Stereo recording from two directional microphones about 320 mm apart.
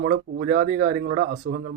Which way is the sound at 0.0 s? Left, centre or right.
Right.